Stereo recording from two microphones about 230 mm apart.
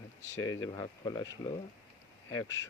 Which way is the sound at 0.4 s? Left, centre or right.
Centre.